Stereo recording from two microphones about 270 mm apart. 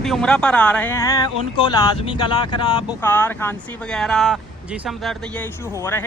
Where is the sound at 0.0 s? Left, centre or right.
Centre.